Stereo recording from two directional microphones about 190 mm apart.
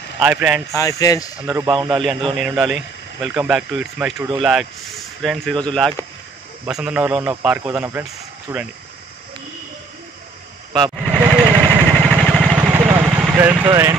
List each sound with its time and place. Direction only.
0.2 s speech: 10° right (ahead or behind)
0.7 s speech: 15° left (ahead or behind)
1.4 s speech: 10° right (ahead or behind)
1.7 s a man's voice: 25° right (ahead or behind)
2.0 s speech: centre (ahead or behind)
10.8 s vehicle: 10° right (ahead or behind)
11.2 s vehicle: 20° right (ahead or behind)
12.2 s vehicle: 5° left (ahead or behind)
12.5 s vehicle: 10° right (ahead or behind)
13.7 s speech: 15° right (ahead or behind)